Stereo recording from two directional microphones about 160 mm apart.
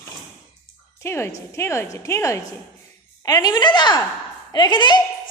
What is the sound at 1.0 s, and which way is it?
A woman's voice, 15° left (ahead or behind).